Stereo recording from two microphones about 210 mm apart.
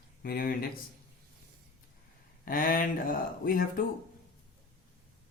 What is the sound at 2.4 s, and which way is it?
Speech, 40° left (ahead or behind).